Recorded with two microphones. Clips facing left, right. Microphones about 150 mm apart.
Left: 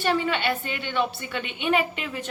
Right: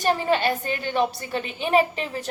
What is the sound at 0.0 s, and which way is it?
A woman's voice, 40° right (ahead or behind).